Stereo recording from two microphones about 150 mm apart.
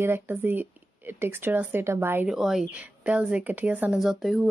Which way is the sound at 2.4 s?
5° right (ahead or behind).